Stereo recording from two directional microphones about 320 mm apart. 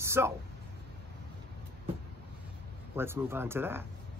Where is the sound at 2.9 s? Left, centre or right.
Centre.